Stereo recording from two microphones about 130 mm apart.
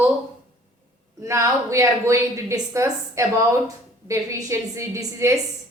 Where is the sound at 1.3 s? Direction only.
25° right (ahead or behind).